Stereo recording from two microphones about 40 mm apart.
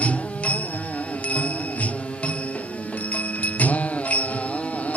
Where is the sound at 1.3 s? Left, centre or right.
Left.